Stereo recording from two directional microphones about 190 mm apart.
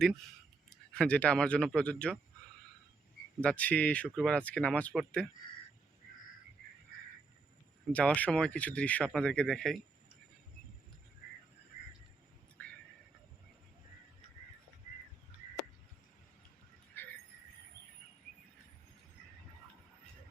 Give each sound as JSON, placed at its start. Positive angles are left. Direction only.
{"t": 0.7, "sound": "speech", "side_deg": 5}
{"t": 3.4, "sound": "speech", "side_deg": 5}
{"t": 7.9, "sound": "speech", "side_deg": 5}
{"t": 16.9, "sound": "vehicle", "side_deg": 10}